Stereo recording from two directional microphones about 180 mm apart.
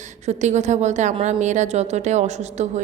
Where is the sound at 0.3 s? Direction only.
40° right (ahead or behind).